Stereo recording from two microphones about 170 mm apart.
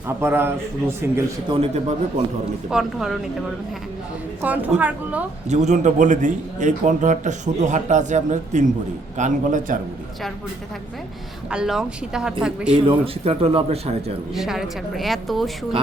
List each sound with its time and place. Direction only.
0.2 s a man's voice: 15° right (ahead or behind)
1.5 s a man's voice: 35° right (ahead or behind)
2.6 s speech: 5° right (ahead or behind)
4.4 s a man's voice: 10° right (ahead or behind)
5.5 s a man's voice: 40° right (ahead or behind)
11.5 s speech: 5° right (ahead or behind)
12.7 s a man's voice: 30° right (ahead or behind)
14.3 s speech: centre (ahead or behind)